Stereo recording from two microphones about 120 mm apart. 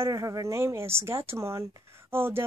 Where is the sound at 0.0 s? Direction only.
30° right (ahead or behind).